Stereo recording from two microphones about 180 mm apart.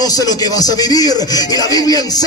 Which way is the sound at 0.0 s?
20° left (ahead or behind).